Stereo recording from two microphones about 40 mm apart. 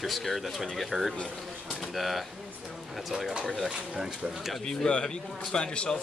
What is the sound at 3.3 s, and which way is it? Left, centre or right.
Speech, right.